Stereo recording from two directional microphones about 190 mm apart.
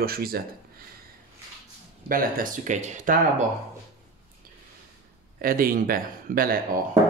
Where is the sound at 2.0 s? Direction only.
45° right (ahead or behind).